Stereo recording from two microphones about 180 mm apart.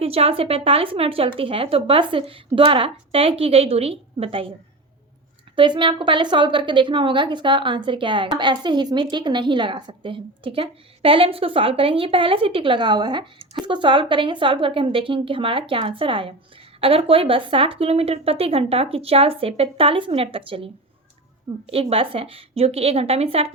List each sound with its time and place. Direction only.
0.0 s speech: 35° right (ahead or behind)
5.5 s a woman's voice: 25° right (ahead or behind)
21.7 s speech: 30° right (ahead or behind)